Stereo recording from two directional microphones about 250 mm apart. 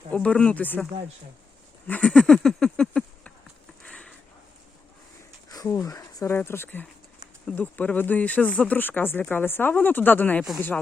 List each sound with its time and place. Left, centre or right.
0.1 s speech: centre
1.9 s goat: centre
3.8 s sniff: centre
5.5 s speech: centre